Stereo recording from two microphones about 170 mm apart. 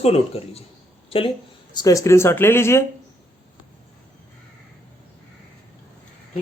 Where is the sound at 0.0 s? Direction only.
35° left (ahead or behind).